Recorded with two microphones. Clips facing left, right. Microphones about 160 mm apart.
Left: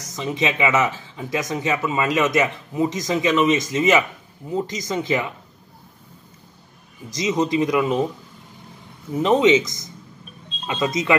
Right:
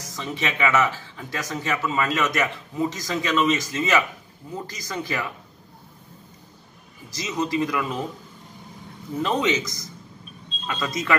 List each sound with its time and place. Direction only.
0.0 s speech: 20° left (ahead or behind)
7.1 s speech: 20° left (ahead or behind)
9.1 s speech: 20° left (ahead or behind)